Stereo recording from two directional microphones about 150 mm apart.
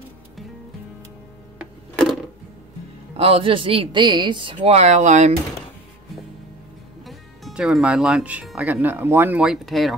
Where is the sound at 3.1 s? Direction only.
40° right (ahead or behind).